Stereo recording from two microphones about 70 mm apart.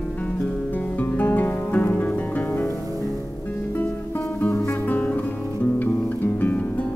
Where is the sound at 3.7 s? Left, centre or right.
Left.